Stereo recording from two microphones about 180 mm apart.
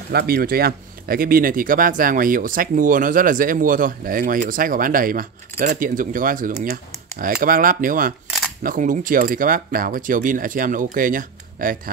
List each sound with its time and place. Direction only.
0.1 s speech: 60° right (ahead or behind)